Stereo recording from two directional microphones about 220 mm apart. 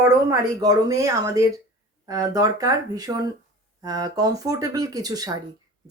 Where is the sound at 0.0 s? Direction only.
15° right (ahead or behind).